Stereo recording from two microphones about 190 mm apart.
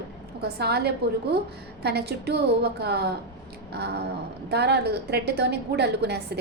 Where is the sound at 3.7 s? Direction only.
60° right (ahead or behind).